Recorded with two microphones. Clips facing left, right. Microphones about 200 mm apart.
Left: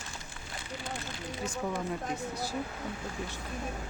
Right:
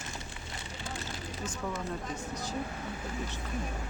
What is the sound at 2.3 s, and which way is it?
Speech, 10° left (ahead or behind).